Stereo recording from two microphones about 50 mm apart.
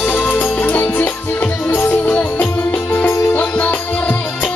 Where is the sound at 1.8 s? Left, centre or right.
Left.